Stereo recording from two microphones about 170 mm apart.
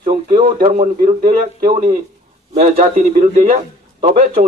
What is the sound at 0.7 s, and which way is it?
Speech, 50° right (ahead or behind).